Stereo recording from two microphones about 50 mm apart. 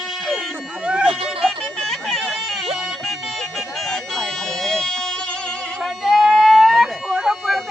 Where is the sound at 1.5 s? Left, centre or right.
Centre.